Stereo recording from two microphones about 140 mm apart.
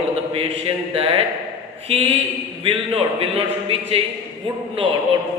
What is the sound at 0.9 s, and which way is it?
Speech, 45° right (ahead or behind).